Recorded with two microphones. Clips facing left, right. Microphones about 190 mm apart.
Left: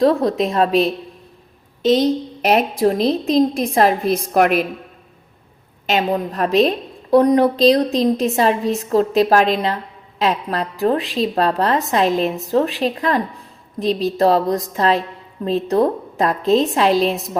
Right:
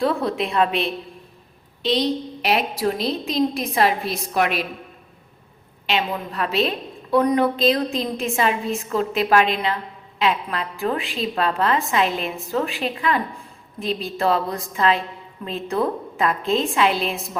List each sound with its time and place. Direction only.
0.0 s a woman's voice: 40° left (ahead or behind)
5.8 s a woman's voice: 45° left (ahead or behind)